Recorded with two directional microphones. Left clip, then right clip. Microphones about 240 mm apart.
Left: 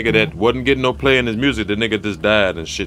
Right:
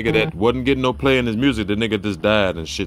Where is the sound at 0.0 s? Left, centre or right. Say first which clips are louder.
Left 2 dB; centre.